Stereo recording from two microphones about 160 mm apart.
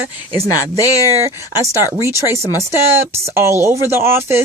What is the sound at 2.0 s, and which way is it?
Speech, 15° right (ahead or behind).